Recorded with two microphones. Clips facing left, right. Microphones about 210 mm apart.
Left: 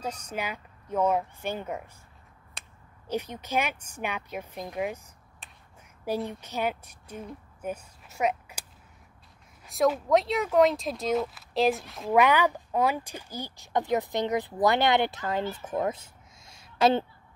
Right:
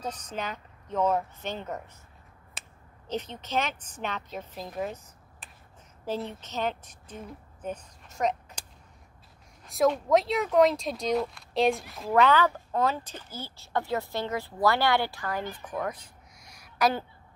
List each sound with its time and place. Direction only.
0.0 s speech: 10° left (ahead or behind)
2.6 s finger snapping: 5° right (ahead or behind)
3.1 s speech: 10° left (ahead or behind)
6.0 s a woman's voice: 10° left (ahead or behind)
9.7 s speech: centre (ahead or behind)
12.1 s speech: 15° left (ahead or behind)
15.5 s a sound: 25° left (ahead or behind)